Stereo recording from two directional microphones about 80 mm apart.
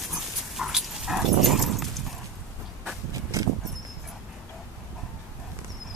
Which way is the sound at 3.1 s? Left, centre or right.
Right.